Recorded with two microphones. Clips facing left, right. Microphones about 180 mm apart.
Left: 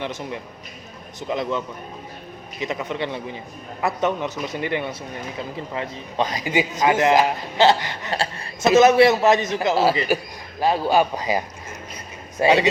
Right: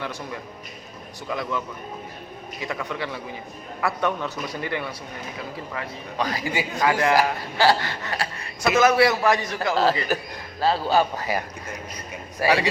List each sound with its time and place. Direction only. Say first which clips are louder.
0.0 s a man's voice: left 3 dB; 20° left (ahead or behind)